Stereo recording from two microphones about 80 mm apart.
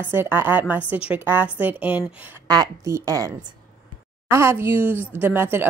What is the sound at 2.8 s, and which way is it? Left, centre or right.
Speech, right.